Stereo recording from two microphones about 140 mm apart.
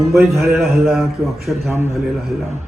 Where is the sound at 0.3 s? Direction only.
Centre (ahead or behind).